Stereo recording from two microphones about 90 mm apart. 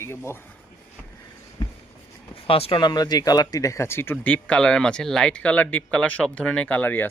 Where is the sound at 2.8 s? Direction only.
50° left (ahead or behind).